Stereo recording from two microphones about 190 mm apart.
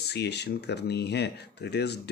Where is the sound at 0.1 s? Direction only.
60° left (ahead or behind).